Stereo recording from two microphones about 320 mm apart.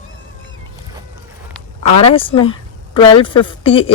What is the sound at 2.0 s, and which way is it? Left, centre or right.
Speech, centre.